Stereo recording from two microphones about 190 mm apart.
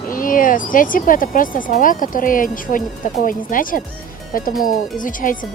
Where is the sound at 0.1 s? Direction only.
45° left (ahead or behind).